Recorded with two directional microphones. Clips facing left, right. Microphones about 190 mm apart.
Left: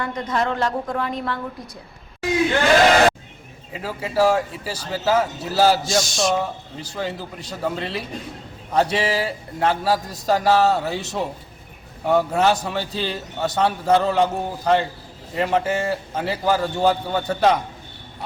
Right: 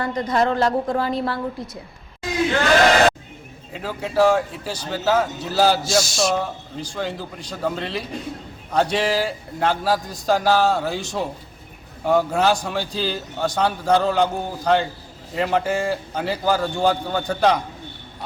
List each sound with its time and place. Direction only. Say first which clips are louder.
0.0 s a woman's voice: right 3 dB; 35° right (ahead or behind)
3.7 s a man's voice: even; 5° left (ahead or behind)